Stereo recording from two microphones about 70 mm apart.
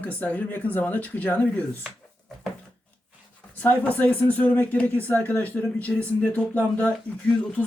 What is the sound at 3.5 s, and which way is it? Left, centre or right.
A man's voice, left.